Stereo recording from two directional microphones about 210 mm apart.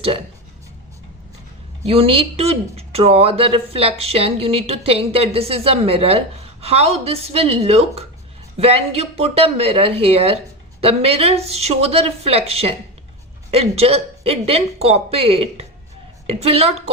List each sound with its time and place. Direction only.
1.9 s speech: 25° right (ahead or behind)